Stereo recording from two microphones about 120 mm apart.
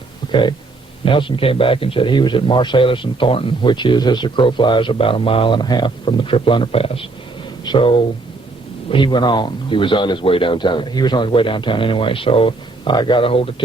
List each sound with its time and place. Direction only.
0.3 s a man's voice: 40° left (ahead or behind)